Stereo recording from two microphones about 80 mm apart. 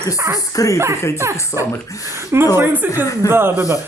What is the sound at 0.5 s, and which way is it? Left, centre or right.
Speech, left.